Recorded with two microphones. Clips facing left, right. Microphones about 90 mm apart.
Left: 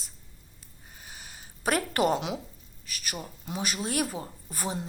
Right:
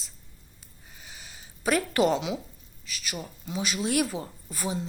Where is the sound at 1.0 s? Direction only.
45° left (ahead or behind).